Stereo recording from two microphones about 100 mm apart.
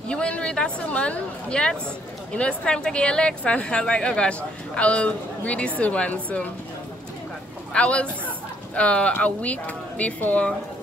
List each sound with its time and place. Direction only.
0.1 s a woman's voice: 10° left (ahead or behind)
7.7 s a woman's voice: 10° left (ahead or behind)